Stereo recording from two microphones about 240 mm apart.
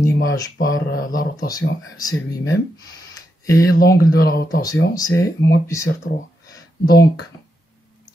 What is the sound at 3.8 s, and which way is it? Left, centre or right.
Speech, left.